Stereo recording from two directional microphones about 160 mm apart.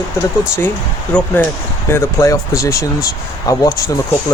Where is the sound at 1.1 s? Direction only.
5° left (ahead or behind).